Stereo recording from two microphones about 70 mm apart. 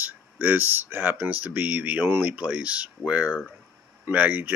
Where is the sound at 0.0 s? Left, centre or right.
Right.